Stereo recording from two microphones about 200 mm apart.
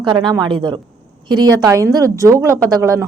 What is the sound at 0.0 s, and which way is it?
A woman's voice, 25° right (ahead or behind).